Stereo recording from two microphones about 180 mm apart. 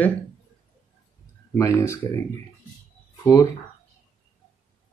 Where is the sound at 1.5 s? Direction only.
15° left (ahead or behind).